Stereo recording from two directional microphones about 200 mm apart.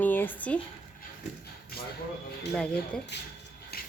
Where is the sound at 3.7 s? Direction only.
50° left (ahead or behind).